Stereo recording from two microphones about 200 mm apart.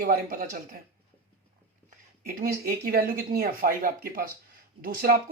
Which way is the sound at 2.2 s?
45° right (ahead or behind).